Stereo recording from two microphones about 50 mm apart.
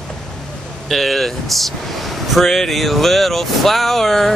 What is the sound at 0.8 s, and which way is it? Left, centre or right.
Speech, centre.